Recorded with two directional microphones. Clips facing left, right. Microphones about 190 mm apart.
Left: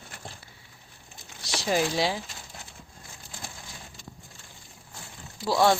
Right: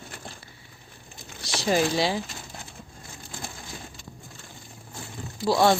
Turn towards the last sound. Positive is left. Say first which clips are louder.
# right 2 dB
turn(degrees=-15)  # may be behind; listen again after turning